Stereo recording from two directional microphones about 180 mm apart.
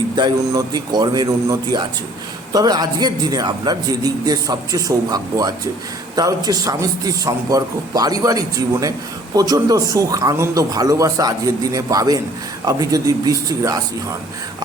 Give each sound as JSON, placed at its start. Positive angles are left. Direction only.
{"t": 0.2, "sound": "a man's voice", "side_deg": -25}